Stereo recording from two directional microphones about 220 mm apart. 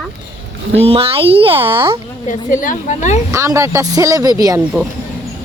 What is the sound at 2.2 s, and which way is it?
Speech, 35° left (ahead or behind).